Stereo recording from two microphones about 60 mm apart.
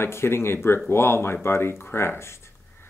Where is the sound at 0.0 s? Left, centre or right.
Left.